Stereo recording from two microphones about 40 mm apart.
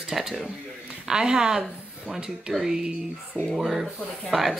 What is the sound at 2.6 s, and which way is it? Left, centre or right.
A woman's voice, centre.